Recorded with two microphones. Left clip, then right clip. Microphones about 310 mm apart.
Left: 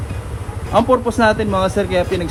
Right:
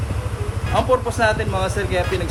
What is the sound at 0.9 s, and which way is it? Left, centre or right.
Speech, left.